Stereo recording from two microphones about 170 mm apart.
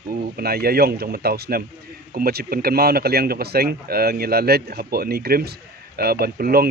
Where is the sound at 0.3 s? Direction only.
65° right (ahead or behind).